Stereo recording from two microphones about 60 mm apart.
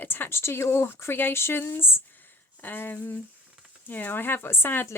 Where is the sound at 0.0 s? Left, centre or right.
Left.